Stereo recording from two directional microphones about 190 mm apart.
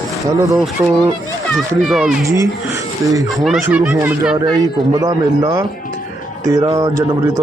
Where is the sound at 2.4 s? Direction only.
15° right (ahead or behind).